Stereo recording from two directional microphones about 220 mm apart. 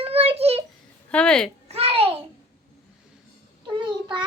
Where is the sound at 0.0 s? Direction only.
25° right (ahead or behind).